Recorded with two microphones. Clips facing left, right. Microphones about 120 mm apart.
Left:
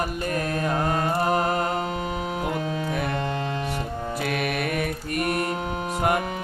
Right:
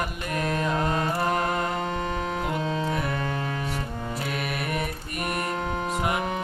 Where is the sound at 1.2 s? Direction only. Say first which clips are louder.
Left 3 dB; 35° left (ahead or behind).